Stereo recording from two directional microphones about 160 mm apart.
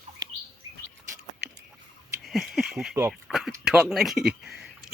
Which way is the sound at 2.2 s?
Centre (ahead or behind).